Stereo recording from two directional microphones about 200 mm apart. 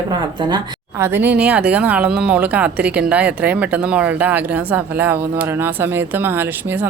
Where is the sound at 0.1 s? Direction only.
20° right (ahead or behind).